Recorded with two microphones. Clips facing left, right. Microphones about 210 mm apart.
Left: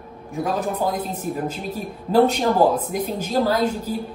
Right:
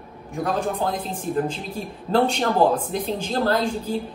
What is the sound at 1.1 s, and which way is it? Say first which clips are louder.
Speech: right 2 dB; 30° right (ahead or behind).